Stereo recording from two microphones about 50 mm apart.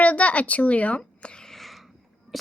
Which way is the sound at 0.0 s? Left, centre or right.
Left.